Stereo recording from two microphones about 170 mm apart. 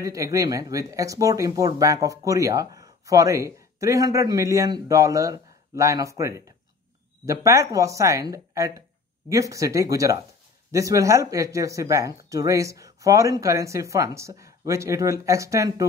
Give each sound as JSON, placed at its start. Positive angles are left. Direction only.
{"t": 0.0, "sound": "speech", "side_deg": -20}